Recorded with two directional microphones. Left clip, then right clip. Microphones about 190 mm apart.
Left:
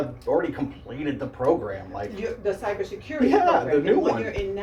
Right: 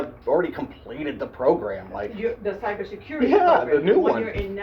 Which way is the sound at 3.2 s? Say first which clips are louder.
Right 2 dB; 35° right (ahead or behind).